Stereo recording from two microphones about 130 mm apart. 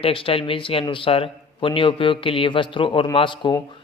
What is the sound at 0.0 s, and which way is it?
A man's voice, 45° left (ahead or behind).